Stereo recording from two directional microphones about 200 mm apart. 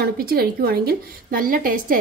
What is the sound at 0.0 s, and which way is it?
A woman's voice, 50° right (ahead or behind).